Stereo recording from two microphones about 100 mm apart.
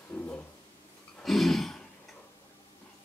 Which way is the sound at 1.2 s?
Centre (ahead or behind).